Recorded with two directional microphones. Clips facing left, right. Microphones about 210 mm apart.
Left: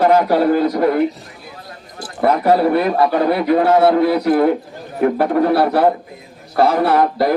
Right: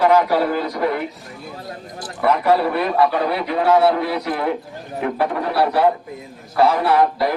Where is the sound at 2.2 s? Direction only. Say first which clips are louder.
Left 3 dB; 45° left (ahead or behind).